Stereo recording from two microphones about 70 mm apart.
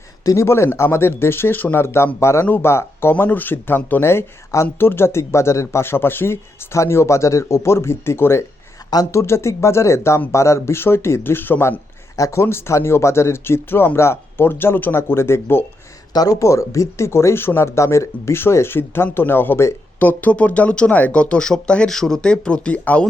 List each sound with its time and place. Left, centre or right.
0.3 s speech: left
4.0 s speech: left
8.8 s a sound: left
9.1 s speech: left
12.1 s speech: left
12.4 s speech: left
16.1 s speech: left
20.0 s speech: left